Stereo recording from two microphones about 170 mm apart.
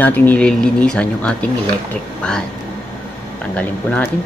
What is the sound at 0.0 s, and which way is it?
Speech, 10° left (ahead or behind).